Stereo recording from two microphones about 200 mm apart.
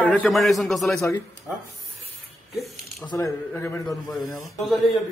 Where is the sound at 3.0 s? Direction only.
15° left (ahead or behind).